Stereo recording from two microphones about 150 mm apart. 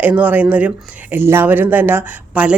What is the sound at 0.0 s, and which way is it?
Speech, 10° right (ahead or behind).